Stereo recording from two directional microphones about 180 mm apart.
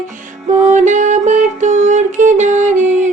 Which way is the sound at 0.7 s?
40° right (ahead or behind).